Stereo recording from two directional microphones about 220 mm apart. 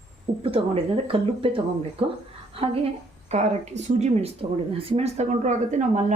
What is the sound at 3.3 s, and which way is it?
Speech, 30° right (ahead or behind).